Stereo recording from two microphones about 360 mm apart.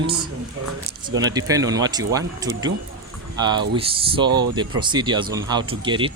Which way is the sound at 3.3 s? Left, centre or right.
Centre.